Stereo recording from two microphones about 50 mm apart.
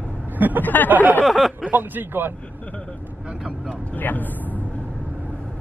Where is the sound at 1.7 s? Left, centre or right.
Right.